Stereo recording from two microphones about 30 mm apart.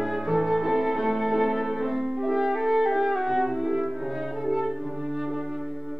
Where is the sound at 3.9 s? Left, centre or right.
Centre.